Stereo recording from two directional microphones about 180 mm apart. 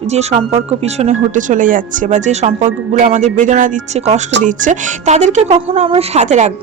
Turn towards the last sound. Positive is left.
turn(degrees=-40)  # may be behind; listen again after turning